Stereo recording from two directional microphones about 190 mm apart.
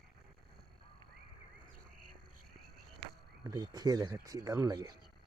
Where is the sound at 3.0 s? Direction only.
20° right (ahead or behind).